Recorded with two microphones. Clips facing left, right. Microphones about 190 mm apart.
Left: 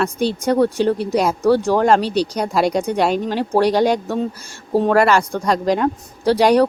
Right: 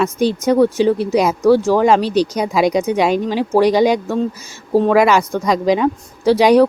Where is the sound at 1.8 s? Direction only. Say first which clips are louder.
Right 2 dB; 5° right (ahead or behind).